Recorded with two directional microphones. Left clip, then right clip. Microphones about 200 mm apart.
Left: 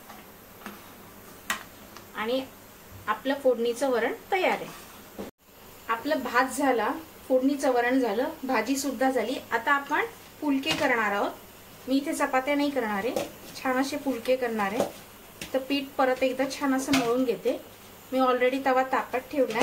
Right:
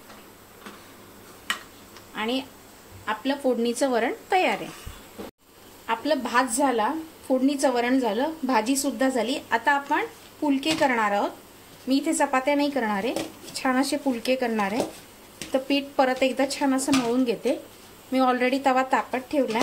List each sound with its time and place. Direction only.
2.2 s a sound: 35° right (ahead or behind)
3.1 s speech: 35° right (ahead or behind)
5.9 s a woman's voice: 45° right (ahead or behind)